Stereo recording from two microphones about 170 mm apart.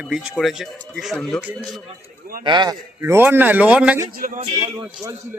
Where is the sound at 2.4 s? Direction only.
25° right (ahead or behind).